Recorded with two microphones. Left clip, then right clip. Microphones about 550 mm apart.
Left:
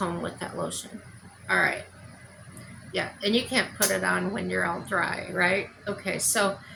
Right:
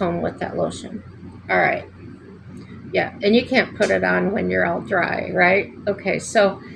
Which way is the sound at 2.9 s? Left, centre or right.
Left.